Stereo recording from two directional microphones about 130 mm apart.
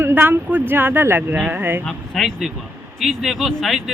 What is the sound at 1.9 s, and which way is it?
A man's voice, centre (ahead or behind).